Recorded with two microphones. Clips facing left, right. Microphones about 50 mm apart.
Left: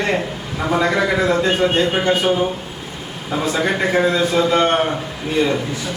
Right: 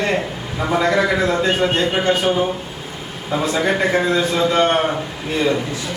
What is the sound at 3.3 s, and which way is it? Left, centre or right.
A man's voice, centre.